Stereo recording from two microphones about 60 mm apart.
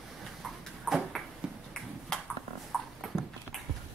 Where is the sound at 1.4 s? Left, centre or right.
Centre.